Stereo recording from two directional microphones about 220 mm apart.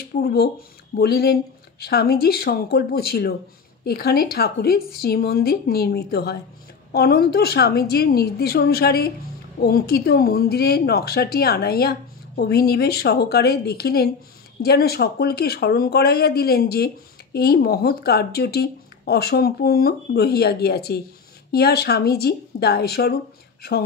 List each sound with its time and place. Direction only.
0.1 s speech: 45° left (ahead or behind)